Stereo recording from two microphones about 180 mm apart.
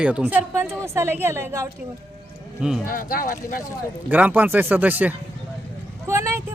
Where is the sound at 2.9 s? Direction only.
50° left (ahead or behind).